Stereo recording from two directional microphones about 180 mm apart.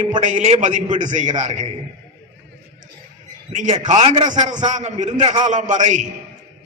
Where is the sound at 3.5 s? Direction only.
45° right (ahead or behind); by 4.7 s 25° right (ahead or behind).